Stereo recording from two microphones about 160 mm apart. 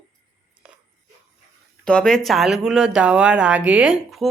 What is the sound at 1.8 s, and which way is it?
Speech, 5° left (ahead or behind).